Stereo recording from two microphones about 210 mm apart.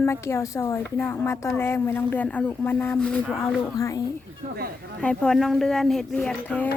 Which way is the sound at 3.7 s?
15° left (ahead or behind).